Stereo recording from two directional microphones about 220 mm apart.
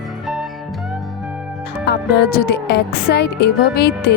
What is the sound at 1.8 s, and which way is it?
Speech, 45° left (ahead or behind).